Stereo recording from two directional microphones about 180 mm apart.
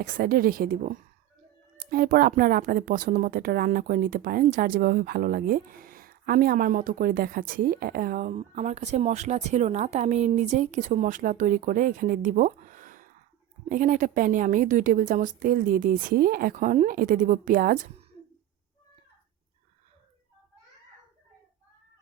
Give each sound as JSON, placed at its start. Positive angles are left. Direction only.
{"t": 0.0, "sound": "speech", "side_deg": -55}
{"t": 8.4, "sound": "a woman's voice", "side_deg": -40}